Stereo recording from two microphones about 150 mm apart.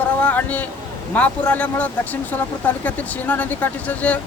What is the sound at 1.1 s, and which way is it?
Speech, 10° left (ahead or behind).